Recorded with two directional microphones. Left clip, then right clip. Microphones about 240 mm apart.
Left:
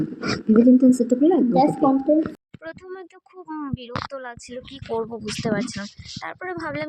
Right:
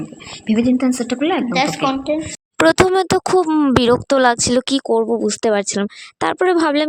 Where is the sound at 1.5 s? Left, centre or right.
Centre.